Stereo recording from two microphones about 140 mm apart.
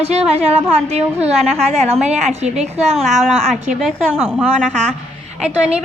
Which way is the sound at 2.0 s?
55° right (ahead or behind).